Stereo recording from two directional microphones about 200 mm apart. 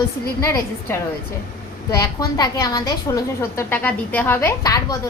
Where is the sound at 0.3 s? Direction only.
15° left (ahead or behind).